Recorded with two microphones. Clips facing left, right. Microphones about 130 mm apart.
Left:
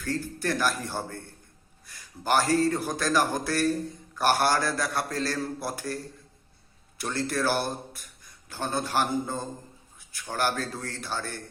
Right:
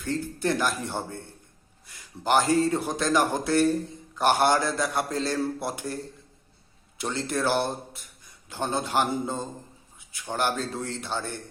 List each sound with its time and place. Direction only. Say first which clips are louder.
0.0 s a man's voice: right 2 dB; 20° right (ahead or behind)
7.0 s a man's voice: right 1 dB; 20° right (ahead or behind)